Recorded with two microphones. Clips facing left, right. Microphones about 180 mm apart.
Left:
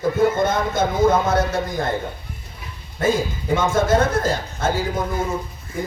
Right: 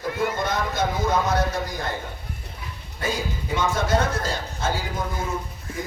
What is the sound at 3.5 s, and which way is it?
Speech, 50° left (ahead or behind).